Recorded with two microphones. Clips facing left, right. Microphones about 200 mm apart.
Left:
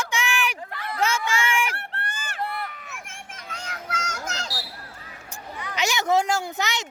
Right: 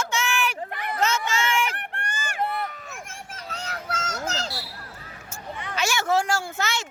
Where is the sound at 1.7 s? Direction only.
15° right (ahead or behind).